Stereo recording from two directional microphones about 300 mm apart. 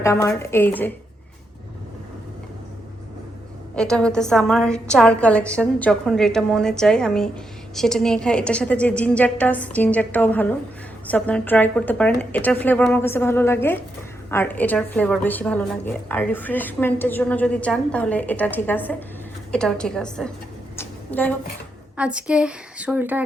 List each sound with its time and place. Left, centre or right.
0.0 s speech: centre
3.8 s a woman's voice: centre
20.7 s a sound: centre
21.9 s a woman's voice: centre